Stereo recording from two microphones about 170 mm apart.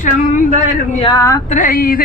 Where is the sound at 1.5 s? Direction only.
55° left (ahead or behind).